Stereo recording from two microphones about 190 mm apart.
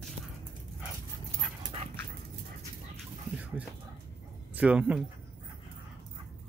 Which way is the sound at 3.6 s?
10° right (ahead or behind).